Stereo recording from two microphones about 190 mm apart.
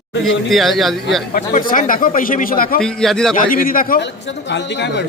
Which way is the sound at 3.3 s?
45° left (ahead or behind).